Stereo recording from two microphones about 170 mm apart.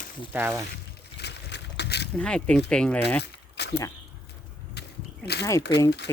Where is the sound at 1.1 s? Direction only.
85° left.